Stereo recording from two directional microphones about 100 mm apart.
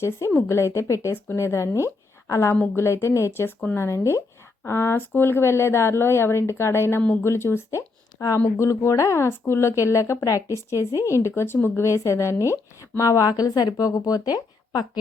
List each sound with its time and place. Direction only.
0.0 s a woman's voice: 25° left (ahead or behind); by 14.8 s 40° left (ahead or behind)